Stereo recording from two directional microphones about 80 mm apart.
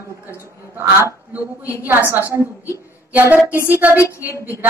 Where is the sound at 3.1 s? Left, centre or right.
Centre.